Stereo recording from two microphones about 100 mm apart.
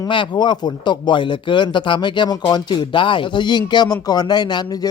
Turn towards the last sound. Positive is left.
turn(degrees=45)  # may be behind; listen again after turning